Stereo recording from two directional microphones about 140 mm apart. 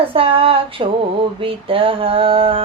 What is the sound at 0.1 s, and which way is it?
Female singing, 40° right (ahead or behind).